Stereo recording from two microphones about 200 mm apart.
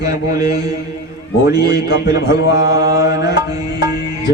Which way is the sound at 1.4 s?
55° left (ahead or behind).